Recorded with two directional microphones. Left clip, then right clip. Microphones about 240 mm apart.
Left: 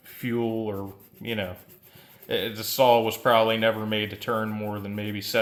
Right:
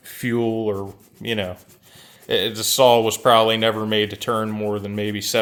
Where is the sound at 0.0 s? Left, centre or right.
Right.